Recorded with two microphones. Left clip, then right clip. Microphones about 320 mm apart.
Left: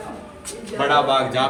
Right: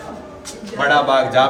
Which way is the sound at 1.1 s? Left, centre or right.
Right.